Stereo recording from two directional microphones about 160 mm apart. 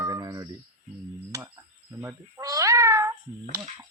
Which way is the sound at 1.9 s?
15° right (ahead or behind).